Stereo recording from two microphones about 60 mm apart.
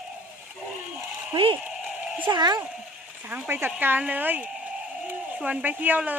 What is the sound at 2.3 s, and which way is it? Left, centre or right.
Speech, right.